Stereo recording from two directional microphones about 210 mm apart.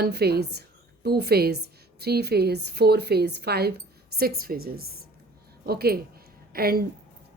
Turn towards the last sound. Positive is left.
turn(degrees=-45)  # may be behind; listen again after turning